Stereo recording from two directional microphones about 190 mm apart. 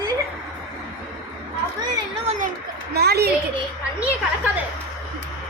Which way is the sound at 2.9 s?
60° right (ahead or behind).